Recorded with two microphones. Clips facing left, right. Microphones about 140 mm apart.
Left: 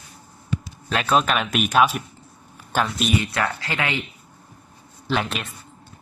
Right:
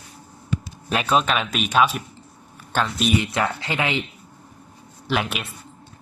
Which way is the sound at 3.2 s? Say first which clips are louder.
Right 1 dB; 20° right (ahead or behind).